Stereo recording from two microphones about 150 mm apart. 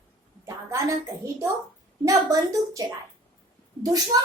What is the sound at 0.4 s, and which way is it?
A woman's voice, 20° right (ahead or behind).